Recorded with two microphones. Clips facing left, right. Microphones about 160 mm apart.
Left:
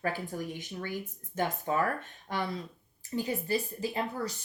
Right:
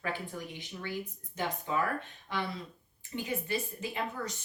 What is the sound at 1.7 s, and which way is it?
Speech, 45° left (ahead or behind).